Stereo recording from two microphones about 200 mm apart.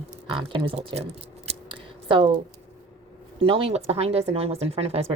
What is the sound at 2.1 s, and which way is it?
Speech, 25° right (ahead or behind).